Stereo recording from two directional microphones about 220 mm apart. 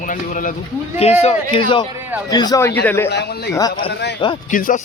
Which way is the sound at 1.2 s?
25° left (ahead or behind).